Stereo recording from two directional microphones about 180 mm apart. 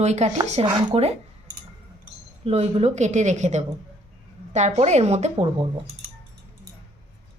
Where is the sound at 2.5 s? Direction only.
35° right (ahead or behind).